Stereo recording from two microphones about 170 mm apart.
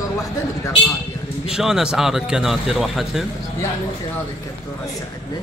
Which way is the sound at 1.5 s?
5° right (ahead or behind).